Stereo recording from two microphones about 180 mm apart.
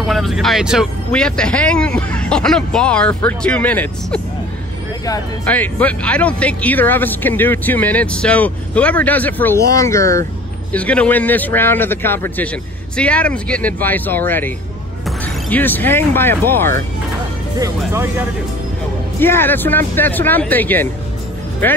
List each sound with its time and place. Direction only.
0.0 s speech: centre (ahead or behind)
5.5 s speech: 10° left (ahead or behind)
17.6 s speech: 15° right (ahead or behind)
19.1 s speech: 10° left (ahead or behind)